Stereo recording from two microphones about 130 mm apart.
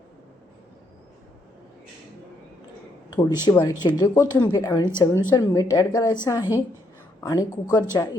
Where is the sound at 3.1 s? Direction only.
30° left (ahead or behind).